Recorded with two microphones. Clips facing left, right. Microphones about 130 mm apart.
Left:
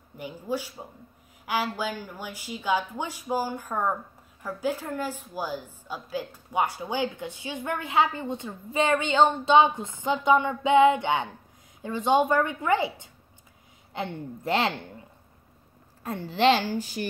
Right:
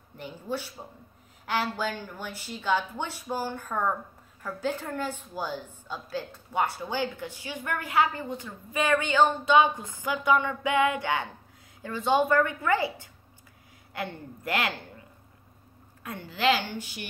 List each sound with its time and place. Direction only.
0.2 s a woman's voice: 10° left (ahead or behind); by 14.9 s 25° left (ahead or behind)
16.0 s a woman's voice: 35° left (ahead or behind)